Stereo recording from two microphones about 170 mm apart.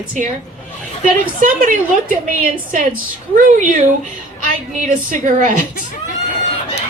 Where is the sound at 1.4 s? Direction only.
50° right (ahead or behind).